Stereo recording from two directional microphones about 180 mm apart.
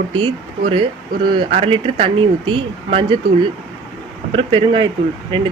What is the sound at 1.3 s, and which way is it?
Speech, 30° right (ahead or behind).